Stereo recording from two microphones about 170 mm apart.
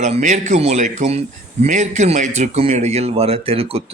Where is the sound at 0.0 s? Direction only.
45° right (ahead or behind).